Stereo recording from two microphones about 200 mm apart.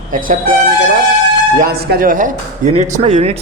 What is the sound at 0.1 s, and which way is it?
Speech, 45° right (ahead or behind).